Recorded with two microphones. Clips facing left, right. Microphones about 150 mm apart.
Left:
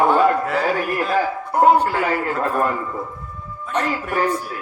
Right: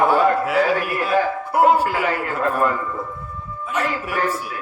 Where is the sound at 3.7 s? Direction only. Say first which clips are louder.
Left 1 dB; 5° right (ahead or behind).